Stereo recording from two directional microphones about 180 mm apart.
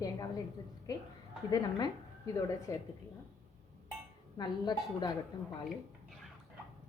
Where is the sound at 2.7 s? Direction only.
15° left (ahead or behind).